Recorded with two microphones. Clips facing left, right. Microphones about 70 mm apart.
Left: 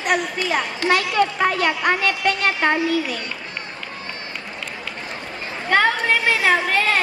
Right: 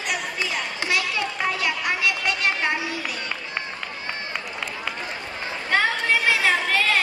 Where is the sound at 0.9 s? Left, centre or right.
Left.